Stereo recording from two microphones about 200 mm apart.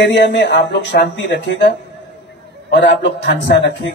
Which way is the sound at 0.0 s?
60° left (ahead or behind).